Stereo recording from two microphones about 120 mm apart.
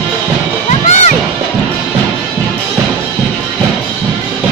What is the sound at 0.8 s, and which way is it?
Music, 80° left.